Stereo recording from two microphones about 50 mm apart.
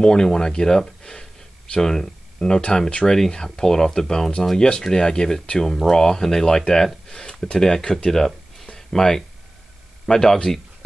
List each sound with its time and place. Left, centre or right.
0.0 s speech: centre